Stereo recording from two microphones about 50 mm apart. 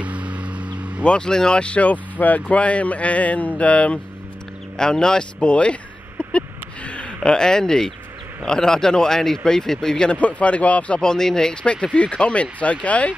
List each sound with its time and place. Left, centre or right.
0.0 s vehicle: right
1.0 s speech: centre
4.7 s a sound: centre
7.3 s speech: centre
10.1 s speech: left
11.1 s speech: centre
11.6 s speech: left